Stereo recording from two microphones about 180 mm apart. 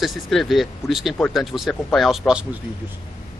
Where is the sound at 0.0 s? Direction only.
Centre (ahead or behind).